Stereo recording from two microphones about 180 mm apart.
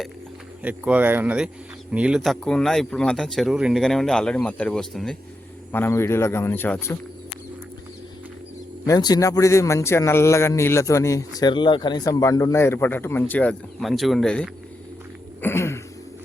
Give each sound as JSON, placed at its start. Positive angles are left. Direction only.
{"t": 0.6, "sound": "a man's voice", "side_deg": -10}
{"t": 8.9, "sound": "a man's voice", "side_deg": 20}
{"t": 15.4, "sound": "a sound", "side_deg": 15}